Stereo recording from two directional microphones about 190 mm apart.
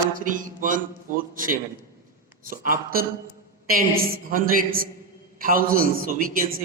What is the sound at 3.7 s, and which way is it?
A man's voice, 50° right (ahead or behind).